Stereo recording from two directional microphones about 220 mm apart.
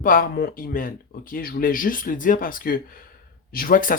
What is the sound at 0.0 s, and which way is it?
Speech, 40° left (ahead or behind).